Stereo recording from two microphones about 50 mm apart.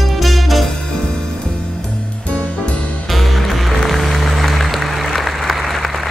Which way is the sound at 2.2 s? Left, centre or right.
Left.